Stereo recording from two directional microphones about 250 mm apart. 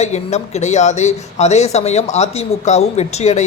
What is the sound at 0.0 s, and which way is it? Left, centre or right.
Speech, left.